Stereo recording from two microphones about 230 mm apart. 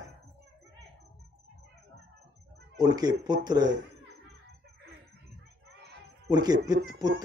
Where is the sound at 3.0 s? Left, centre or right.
Centre.